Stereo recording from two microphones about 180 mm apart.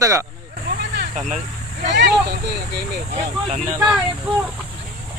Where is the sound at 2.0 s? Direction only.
70° right (ahead or behind).